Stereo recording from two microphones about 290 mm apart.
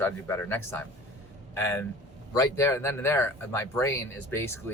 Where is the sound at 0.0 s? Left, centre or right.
Centre.